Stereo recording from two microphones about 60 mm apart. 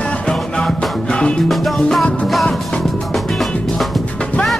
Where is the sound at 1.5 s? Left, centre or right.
Centre.